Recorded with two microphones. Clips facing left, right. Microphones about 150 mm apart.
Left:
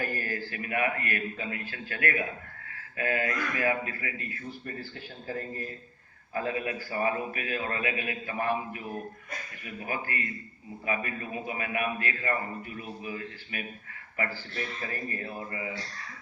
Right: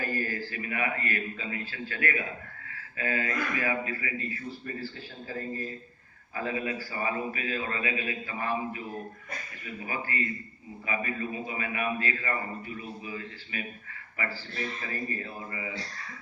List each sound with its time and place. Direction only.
0.0 s a man's voice: 50° left (ahead or behind)
5.3 s a man's voice: 55° left (ahead or behind)
10.8 s a man's voice: 55° left (ahead or behind)
15.2 s a man's voice: 50° left (ahead or behind)